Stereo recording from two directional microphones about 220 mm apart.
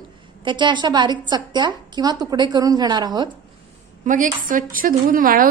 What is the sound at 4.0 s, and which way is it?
A woman's voice, 35° right (ahead or behind).